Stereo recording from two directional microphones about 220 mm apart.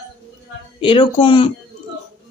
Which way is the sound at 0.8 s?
20° left (ahead or behind).